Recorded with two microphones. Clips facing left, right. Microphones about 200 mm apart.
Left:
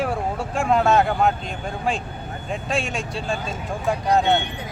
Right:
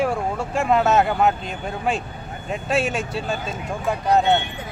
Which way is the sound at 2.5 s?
5° right (ahead or behind).